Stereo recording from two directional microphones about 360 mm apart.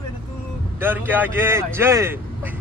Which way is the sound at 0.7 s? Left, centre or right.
Centre.